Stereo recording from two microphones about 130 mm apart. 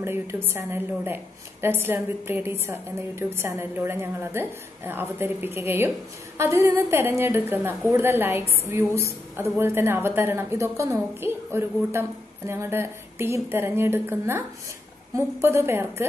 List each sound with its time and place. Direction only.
0.0 s a woman's voice: 20° right (ahead or behind)